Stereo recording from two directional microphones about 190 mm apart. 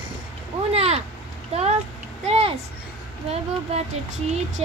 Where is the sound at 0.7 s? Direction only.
30° right (ahead or behind).